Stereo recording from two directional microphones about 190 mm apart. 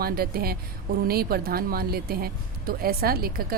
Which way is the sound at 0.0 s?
50° right (ahead or behind).